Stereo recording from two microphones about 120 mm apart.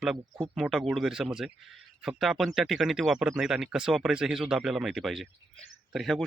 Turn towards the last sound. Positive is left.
turn(degrees=0)  # may be behind; listen again after turning